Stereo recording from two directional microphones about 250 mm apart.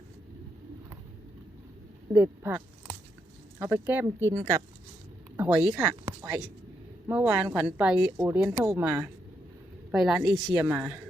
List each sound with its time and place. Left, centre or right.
2.1 s a woman's voice: centre
10.2 s speech: centre
10.5 s a woman's voice: centre